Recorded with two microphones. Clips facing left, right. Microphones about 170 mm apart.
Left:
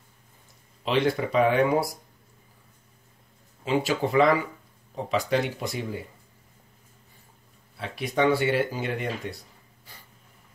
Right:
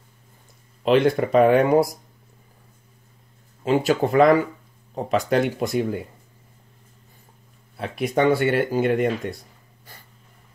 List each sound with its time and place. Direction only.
0.8 s speech: 50° right (ahead or behind)
3.6 s speech: 50° right (ahead or behind)
7.7 s speech: 50° right (ahead or behind)